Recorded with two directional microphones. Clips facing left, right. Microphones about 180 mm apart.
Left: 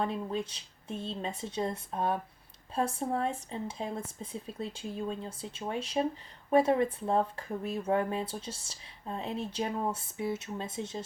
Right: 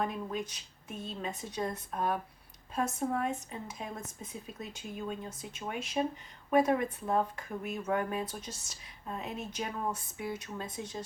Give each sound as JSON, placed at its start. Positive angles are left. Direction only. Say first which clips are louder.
{"t": 0.0, "sound": "speech", "louder": "left 2 dB", "side_deg": 30}